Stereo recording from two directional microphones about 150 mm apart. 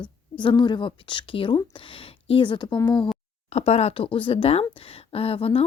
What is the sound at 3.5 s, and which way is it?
A woman's voice, 45° left (ahead or behind).